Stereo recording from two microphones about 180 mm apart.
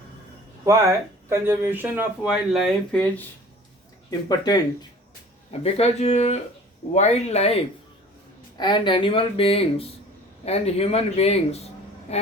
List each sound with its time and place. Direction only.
0.6 s speech: 15° right (ahead or behind); by 3.2 s 5° left (ahead or behind)
4.3 s speech: 20° left (ahead or behind)
5.5 s a man's voice: 35° left (ahead or behind)